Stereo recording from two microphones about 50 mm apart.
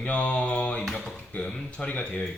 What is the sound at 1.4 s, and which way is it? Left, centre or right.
Speech, centre.